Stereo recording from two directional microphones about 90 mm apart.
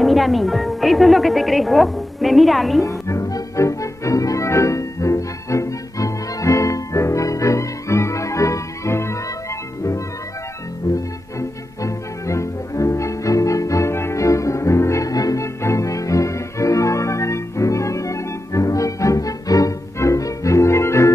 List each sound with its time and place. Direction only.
0.0 s a woman's voice: centre (ahead or behind)
2.8 s music: 35° left (ahead or behind)
11.0 s music: 35° left (ahead or behind)